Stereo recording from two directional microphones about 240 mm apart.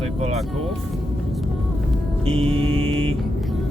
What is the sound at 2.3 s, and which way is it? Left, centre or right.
Speech, right.